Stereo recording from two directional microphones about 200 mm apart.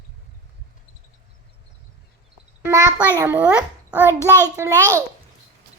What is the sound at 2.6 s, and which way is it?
A child's voice, 15° right (ahead or behind).